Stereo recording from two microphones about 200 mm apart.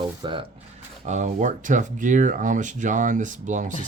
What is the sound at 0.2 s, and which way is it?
Speech, 25° right (ahead or behind).